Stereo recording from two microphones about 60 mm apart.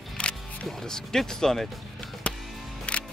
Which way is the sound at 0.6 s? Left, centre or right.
Centre.